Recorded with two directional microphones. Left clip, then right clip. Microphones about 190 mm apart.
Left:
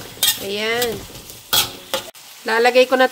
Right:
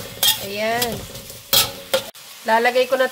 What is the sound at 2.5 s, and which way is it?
Speech, 55° left (ahead or behind).